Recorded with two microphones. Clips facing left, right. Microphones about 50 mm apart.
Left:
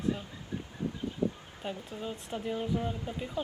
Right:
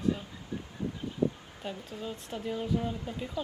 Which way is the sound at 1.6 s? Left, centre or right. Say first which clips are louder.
Left 1 dB; centre.